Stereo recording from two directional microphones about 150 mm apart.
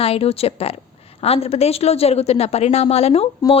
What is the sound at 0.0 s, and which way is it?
A woman's voice, 40° left (ahead or behind).